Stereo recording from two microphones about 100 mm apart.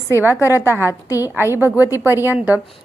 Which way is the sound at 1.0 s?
35° left (ahead or behind).